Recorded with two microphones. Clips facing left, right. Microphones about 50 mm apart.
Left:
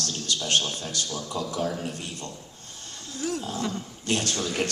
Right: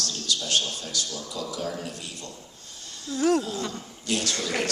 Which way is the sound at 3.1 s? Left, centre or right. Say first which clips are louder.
Right 8 dB; right.